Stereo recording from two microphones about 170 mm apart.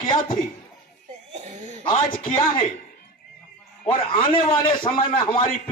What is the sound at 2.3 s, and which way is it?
Speech, 30° left (ahead or behind).